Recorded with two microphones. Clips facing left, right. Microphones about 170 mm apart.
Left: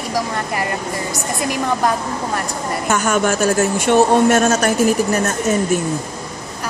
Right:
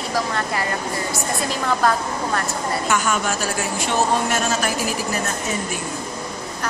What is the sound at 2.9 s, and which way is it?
A woman's voice, 45° left (ahead or behind).